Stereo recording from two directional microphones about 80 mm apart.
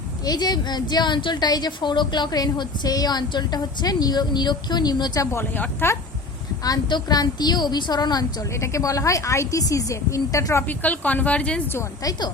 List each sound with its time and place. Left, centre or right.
0.3 s a woman's voice: left
5.2 s a woman's voice: left
6.8 s a woman's voice: left
8.5 s a woman's voice: left
10.7 s a woman's voice: centre